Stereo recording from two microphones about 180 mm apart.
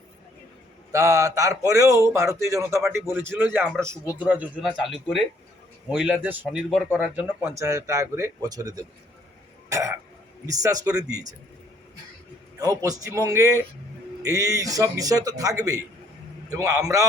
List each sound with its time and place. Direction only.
0.9 s speech: 15° right (ahead or behind)
9.6 s throat clearing: 15° right (ahead or behind)
10.4 s a man's voice: 20° right (ahead or behind)
12.5 s a man's voice: 20° right (ahead or behind)